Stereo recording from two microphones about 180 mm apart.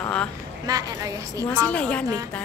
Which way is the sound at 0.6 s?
20° right (ahead or behind).